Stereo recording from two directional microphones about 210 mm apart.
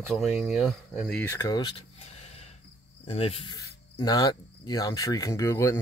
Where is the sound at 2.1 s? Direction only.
30° left (ahead or behind).